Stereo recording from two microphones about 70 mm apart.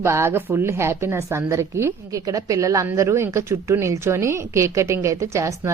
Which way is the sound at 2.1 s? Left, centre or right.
Right.